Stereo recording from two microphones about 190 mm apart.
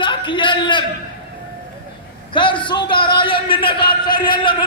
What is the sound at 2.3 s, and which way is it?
A man's voice, 25° left (ahead or behind).